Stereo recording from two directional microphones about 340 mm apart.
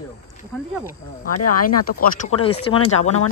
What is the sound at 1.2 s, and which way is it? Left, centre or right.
Speech, left.